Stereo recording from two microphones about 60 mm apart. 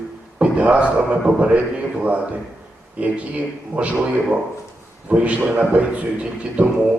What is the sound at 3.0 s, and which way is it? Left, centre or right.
A man's voice, right.